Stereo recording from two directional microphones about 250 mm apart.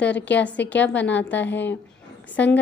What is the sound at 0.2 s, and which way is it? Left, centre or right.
A woman's voice, centre.